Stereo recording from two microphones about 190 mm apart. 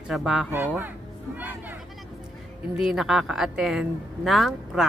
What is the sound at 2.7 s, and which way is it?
A woman's voice, centre (ahead or behind).